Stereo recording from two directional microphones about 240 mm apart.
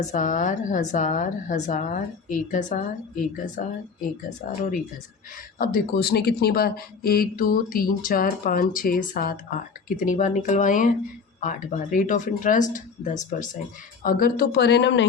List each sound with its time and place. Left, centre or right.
0.0 s speech: left